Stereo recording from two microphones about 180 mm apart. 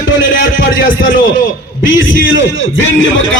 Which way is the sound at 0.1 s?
90° left.